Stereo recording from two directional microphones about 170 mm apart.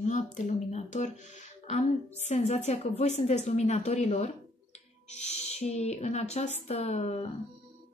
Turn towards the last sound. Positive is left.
turn(degrees=40)  # may be behind; listen again after turning